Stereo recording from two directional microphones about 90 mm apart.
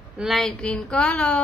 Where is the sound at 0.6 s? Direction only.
10° left (ahead or behind).